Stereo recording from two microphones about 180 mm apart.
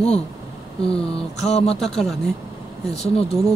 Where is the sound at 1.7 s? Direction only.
Centre (ahead or behind).